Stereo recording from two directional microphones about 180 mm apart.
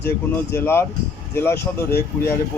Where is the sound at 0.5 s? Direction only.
15° left (ahead or behind).